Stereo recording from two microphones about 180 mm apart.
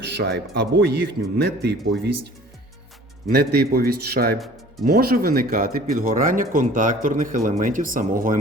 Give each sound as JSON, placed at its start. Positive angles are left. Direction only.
{"t": 0.2, "sound": "speech", "side_deg": -70}